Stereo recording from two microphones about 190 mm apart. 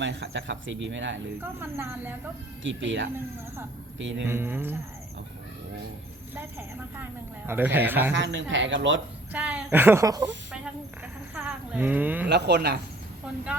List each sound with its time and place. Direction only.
0.0 s speech: 70° right (ahead or behind)
1.4 s speech: 10° right (ahead or behind)
2.6 s speech: 75° right (ahead or behind)
4.3 s speech: 10° right (ahead or behind)
6.3 s speech: 10° right (ahead or behind)
8.1 s speech: 70° right (ahead or behind)
9.3 s speech: 5° right (ahead or behind)
11.0 s sheep: 5° right (ahead or behind)
12.3 s speech: 60° right (ahead or behind)